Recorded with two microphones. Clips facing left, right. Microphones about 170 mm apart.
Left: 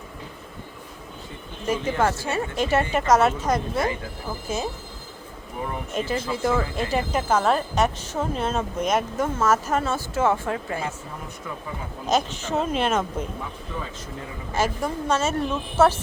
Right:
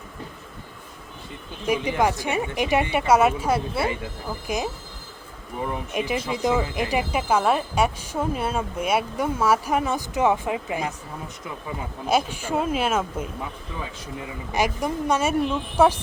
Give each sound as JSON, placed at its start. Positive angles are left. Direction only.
{"t": 1.6, "sound": "speech", "side_deg": -15}
{"t": 5.9, "sound": "speech", "side_deg": -15}
{"t": 12.0, "sound": "speech", "side_deg": -10}
{"t": 14.5, "sound": "speech", "side_deg": -15}